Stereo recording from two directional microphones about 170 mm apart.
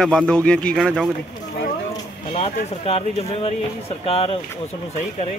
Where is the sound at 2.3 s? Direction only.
35° left (ahead or behind).